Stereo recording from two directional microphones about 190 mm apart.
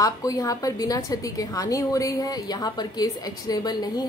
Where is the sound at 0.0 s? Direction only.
20° left (ahead or behind).